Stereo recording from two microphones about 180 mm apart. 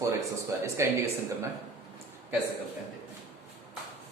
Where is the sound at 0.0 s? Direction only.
15° right (ahead or behind).